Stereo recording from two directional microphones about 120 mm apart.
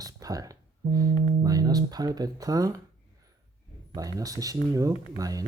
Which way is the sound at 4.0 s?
30° right (ahead or behind).